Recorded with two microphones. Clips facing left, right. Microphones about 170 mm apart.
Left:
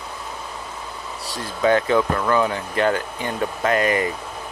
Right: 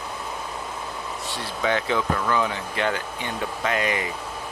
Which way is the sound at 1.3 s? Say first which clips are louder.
Left 7 dB; 45° left (ahead or behind).